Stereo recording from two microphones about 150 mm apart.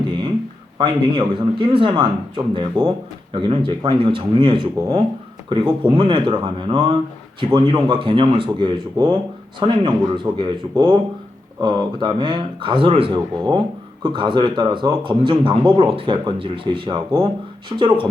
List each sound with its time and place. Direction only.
0.8 s speech: 30° right (ahead or behind)